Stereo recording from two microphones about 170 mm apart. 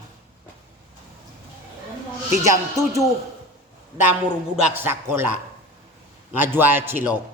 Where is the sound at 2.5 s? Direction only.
20° right (ahead or behind).